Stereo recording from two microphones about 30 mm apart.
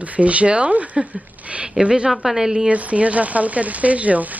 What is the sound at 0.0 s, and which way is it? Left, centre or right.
Speech, right.